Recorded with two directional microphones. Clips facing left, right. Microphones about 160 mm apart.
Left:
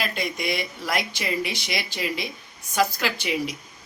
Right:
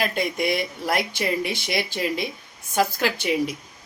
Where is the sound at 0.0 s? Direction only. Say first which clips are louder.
Right 4 dB; 50° right (ahead or behind).